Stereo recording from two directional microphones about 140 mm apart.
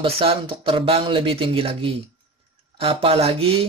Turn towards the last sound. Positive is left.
turn(degrees=-40)  # may be behind; listen again after turning